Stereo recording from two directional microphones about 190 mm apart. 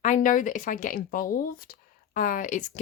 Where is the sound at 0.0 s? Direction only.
40° left (ahead or behind).